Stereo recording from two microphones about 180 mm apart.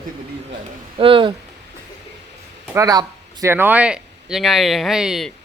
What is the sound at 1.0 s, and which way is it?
Speech, 30° right (ahead or behind).